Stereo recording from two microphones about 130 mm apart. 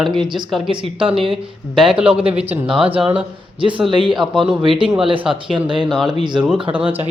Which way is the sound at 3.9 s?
40° right (ahead or behind).